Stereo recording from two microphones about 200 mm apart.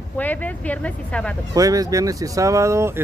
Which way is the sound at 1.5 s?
15° right (ahead or behind).